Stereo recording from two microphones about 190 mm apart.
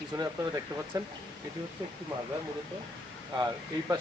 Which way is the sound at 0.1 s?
15° right (ahead or behind).